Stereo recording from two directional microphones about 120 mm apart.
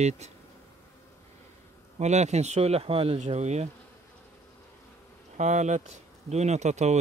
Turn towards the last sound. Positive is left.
turn(degrees=-75)  # may be behind; listen again after turning